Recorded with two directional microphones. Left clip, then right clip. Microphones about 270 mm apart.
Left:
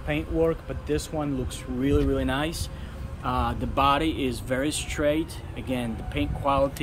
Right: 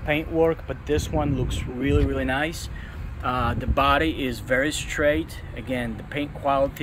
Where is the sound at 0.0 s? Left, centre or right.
Centre.